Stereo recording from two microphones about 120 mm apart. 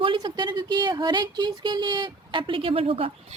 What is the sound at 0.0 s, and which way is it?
A woman's voice, 45° right (ahead or behind).